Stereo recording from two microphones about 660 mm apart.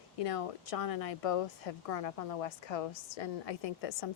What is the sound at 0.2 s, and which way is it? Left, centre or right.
Speech, left.